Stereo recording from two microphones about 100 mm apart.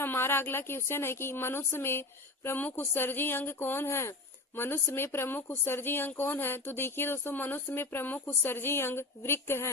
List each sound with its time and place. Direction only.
0.0 s speech: 20° left (ahead or behind)